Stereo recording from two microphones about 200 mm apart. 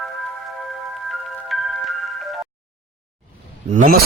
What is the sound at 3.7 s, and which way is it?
Speech, 40° right (ahead or behind).